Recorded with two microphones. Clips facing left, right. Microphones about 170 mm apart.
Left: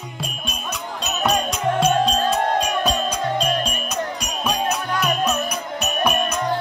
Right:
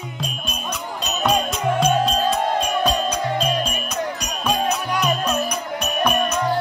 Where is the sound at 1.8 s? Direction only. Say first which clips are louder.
Left 1 dB; 10° right (ahead or behind).